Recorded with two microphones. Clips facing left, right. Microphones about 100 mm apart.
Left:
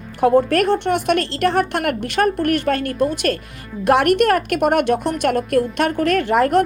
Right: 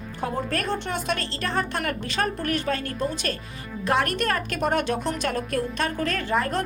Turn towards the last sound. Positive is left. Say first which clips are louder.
# left 10 dB
turn(degrees=65)  # may be behind; listen again after turning